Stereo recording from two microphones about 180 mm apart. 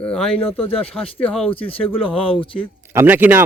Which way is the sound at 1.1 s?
10° left (ahead or behind).